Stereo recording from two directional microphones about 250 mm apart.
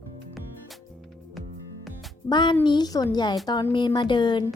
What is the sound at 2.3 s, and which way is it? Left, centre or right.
A woman's voice, centre.